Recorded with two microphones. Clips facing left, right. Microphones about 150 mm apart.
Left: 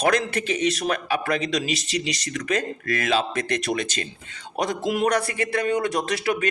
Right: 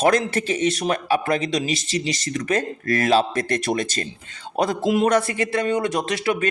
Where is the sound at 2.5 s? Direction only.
35° right (ahead or behind).